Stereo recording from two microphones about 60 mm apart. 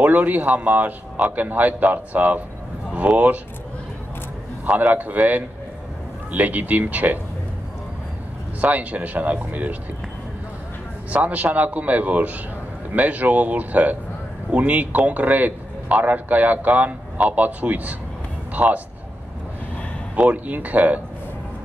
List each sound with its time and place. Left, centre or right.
0.0 s a man's voice: right
4.6 s a man's voice: right
8.5 s a man's voice: right
11.1 s a man's voice: right
20.2 s a man's voice: right